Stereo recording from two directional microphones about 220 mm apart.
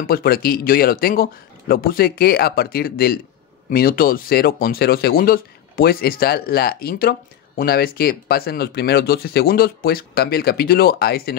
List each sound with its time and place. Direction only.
0.0 s speech: 40° left (ahead or behind)